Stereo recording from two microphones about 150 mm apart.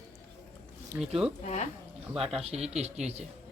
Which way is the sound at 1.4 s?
50° left (ahead or behind).